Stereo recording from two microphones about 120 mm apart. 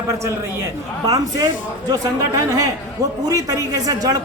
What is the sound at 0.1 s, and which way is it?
Speech, 25° right (ahead or behind).